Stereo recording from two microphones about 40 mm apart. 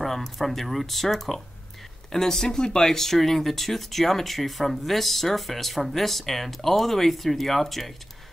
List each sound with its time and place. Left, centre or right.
0.0 s speech: centre